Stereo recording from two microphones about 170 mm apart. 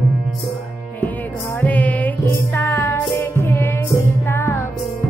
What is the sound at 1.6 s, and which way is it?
Music, 10° left (ahead or behind).